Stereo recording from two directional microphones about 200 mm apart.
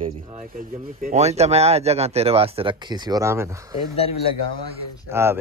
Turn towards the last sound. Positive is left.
turn(degrees=-10)  # may be behind; listen again after turning